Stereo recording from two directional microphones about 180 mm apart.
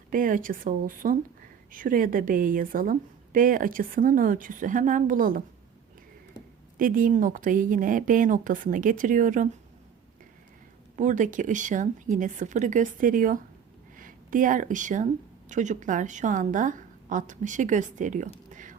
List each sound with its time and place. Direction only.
0.1 s speech: 50° right (ahead or behind)
6.7 s speech: 50° right (ahead or behind)
10.9 s speech: 45° right (ahead or behind)
18.5 s whispering: 45° right (ahead or behind)